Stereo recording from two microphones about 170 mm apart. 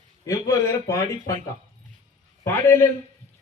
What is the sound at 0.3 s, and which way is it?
A man's voice, 20° left (ahead or behind).